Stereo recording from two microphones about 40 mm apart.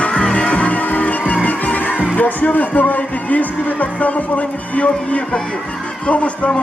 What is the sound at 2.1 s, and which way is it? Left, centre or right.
Speech, left.